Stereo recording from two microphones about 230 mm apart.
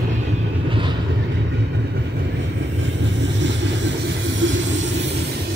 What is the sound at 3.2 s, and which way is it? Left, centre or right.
Vehicle, right.